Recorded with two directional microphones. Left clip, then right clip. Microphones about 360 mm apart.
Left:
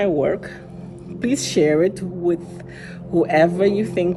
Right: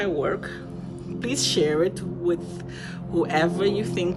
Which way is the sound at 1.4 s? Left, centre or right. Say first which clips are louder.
Left 1 dB; centre.